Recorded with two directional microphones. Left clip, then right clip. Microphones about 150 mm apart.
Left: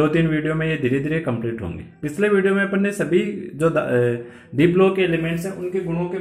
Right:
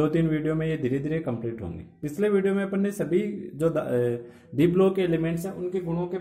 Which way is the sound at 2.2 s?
20° right (ahead or behind).